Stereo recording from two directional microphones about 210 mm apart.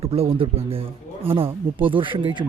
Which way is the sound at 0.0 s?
30° right (ahead or behind).